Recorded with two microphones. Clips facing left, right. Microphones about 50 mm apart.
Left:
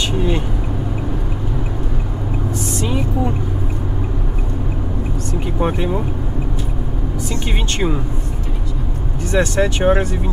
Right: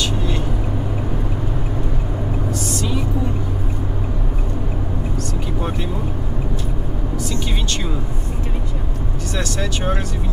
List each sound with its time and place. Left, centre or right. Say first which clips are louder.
2.8 s vehicle: left 5 dB; left
5.6 s vehicle: left 7 dB; left
9.3 s speech: left 9 dB; left